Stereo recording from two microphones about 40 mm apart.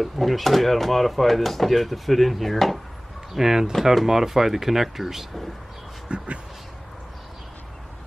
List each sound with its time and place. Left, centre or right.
0.0 s speech: centre
3.3 s speech: centre
6.0 s a sound: right